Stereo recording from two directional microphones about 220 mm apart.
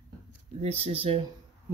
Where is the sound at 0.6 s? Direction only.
25° right (ahead or behind).